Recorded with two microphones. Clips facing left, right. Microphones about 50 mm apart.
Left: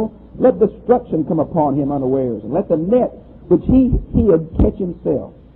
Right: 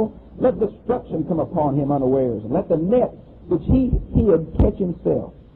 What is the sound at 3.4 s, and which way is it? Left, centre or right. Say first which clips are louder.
Speech: left 7 dB; left.